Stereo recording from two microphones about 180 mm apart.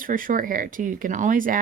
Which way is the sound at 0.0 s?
50° right (ahead or behind).